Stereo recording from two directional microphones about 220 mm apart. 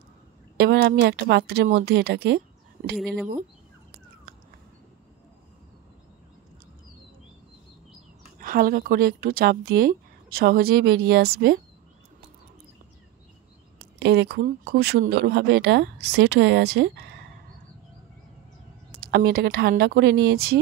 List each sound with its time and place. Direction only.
0.6 s speech: 45° right (ahead or behind)
3.0 s speech: centre (ahead or behind)
8.4 s speech: 40° right (ahead or behind)
13.9 s speech: 50° right (ahead or behind)
18.9 s speech: 45° right (ahead or behind)